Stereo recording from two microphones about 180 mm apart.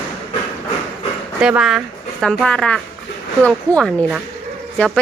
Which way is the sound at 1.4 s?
5° right (ahead or behind).